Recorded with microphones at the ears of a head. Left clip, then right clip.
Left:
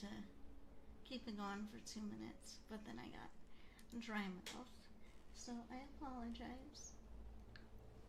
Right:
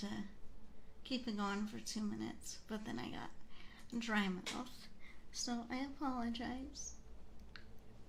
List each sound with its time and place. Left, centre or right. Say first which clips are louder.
0.0 s speech: right 7 dB; right